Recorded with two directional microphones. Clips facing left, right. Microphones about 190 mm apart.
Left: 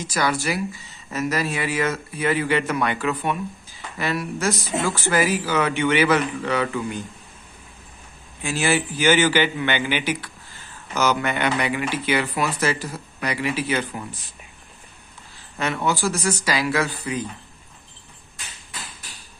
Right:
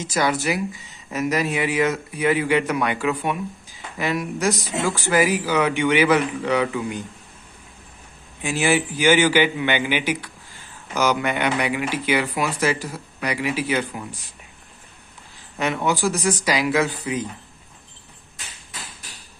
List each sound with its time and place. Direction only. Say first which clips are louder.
0.0 s speech: right 2 dB; 20° right (ahead or behind)
8.4 s speech: right 2 dB; 15° right (ahead or behind)
15.5 s speech: right 1 dB; 15° right (ahead or behind)